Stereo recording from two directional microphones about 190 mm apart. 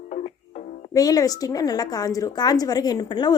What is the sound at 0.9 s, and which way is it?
A woman's voice, 20° left (ahead or behind).